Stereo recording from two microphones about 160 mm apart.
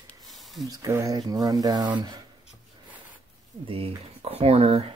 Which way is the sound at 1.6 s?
25° right (ahead or behind).